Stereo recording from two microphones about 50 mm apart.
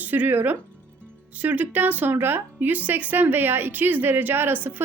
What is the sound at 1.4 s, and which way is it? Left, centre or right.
A woman's voice, right.